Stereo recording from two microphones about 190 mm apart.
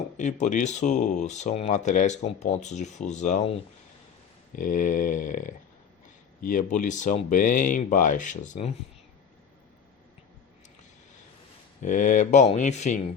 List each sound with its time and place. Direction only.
0.2 s speech: 40° left (ahead or behind)
11.8 s speech: 40° left (ahead or behind)